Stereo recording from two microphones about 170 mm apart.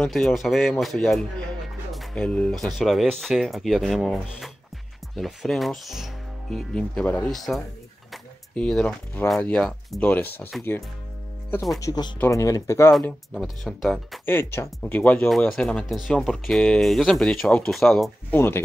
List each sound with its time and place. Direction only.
0.0 s speech: centre (ahead or behind)
11.8 s speech: 25° left (ahead or behind)
13.0 s speech: centre (ahead or behind)
14.2 s speech: 15° left (ahead or behind)
18.3 s speech: 15° left (ahead or behind)